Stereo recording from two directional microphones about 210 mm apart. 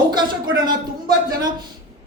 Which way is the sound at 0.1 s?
20° right (ahead or behind).